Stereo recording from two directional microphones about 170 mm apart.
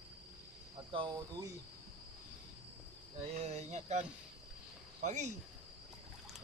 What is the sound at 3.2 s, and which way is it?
Speech, 40° right (ahead or behind).